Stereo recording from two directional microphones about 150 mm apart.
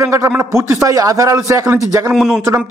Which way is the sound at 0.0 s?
20° right (ahead or behind).